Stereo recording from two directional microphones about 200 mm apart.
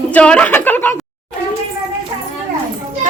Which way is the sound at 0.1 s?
5° left (ahead or behind).